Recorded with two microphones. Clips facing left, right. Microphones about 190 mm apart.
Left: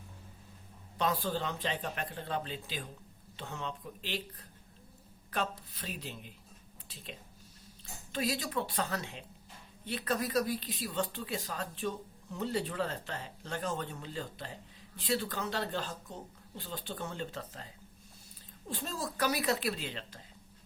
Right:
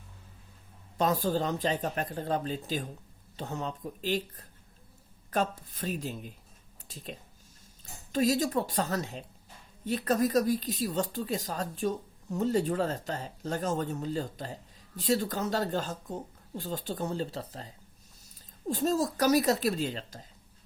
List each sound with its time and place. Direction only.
0.9 s speech: 40° right (ahead or behind)
18.7 s speech: 40° right (ahead or behind)